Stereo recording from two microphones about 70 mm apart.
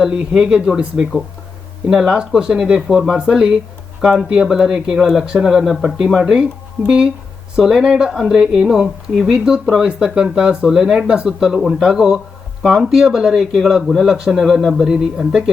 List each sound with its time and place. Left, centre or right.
0.2 s speech: centre